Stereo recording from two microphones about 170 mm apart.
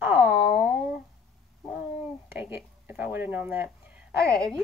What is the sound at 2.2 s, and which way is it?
A woman's voice, 10° right (ahead or behind).